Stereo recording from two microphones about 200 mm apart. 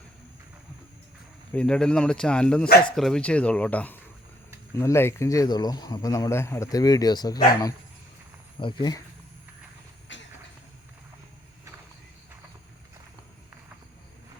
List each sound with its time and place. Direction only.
1.5 s a man's voice: 5° left (ahead or behind); by 9.0 s 25° left (ahead or behind)
10.1 s vehicle: 65° left (ahead or behind)